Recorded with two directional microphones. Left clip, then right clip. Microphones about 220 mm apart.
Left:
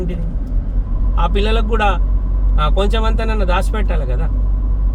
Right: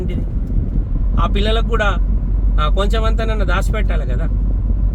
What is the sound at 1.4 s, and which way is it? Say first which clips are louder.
Speech: left 1 dB; 30° right (ahead or behind).